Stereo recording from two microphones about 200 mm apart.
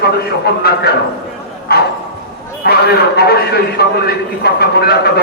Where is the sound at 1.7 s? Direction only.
50° left (ahead or behind).